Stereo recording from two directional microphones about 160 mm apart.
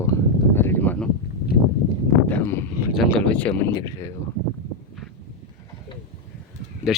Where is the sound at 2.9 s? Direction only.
10° left (ahead or behind).